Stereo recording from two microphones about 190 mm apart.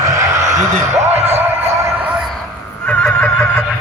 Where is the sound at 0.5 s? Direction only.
15° right (ahead or behind).